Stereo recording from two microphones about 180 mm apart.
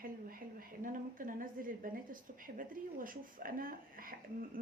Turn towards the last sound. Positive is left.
turn(degrees=-50)  # may be behind; listen again after turning